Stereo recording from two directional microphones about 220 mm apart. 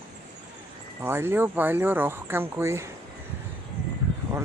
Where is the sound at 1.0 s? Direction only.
10° right (ahead or behind).